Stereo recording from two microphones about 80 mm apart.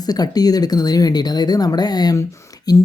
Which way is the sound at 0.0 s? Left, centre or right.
Left.